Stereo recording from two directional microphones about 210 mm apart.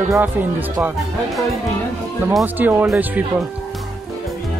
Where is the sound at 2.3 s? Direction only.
5° right (ahead or behind).